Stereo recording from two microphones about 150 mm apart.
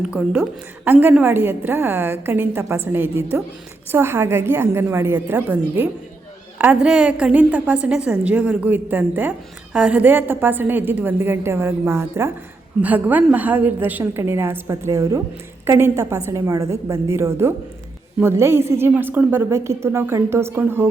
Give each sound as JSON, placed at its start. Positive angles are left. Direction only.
{"t": 0.0, "sound": "a woman's voice", "side_deg": -5}